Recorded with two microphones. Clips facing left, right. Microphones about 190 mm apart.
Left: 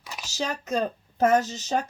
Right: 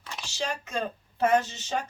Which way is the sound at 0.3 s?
40° left (ahead or behind).